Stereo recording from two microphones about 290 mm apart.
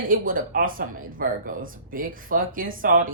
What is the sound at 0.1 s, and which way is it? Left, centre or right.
Speech, right.